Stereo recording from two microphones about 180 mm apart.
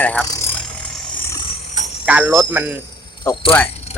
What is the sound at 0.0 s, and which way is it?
Speech, 10° left (ahead or behind).